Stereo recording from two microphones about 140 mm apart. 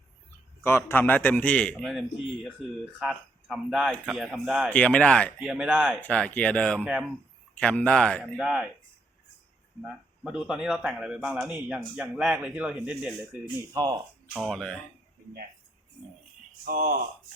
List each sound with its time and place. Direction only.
0.6 s a man's voice: 15° left (ahead or behind); by 4.7 s 5° right (ahead or behind)
4.7 s speech: 10° left (ahead or behind)
5.5 s a man's voice: 10° right (ahead or behind)
6.0 s a man's voice: 10° left (ahead or behind)
9.8 s a man's voice: 5° right (ahead or behind)
13.4 s speech: 30° right (ahead or behind)
14.5 s speech: 5° left (ahead or behind)
16.6 s speech: 90° right